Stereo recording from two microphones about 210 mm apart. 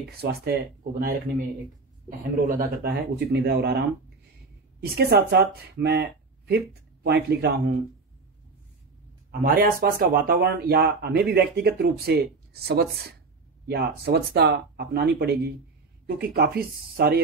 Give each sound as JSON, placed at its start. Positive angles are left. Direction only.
{"t": 0.2, "sound": "speech", "side_deg": -50}
{"t": 4.9, "sound": "speech", "side_deg": -50}
{"t": 9.4, "sound": "speech", "side_deg": -45}